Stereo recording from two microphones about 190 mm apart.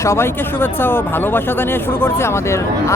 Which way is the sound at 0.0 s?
15° left (ahead or behind).